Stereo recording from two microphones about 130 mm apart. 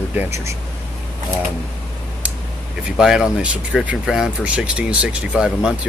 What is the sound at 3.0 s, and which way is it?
Speech, 5° right (ahead or behind).